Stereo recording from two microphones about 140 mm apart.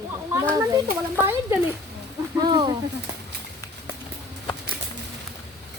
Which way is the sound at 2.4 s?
35° right (ahead or behind).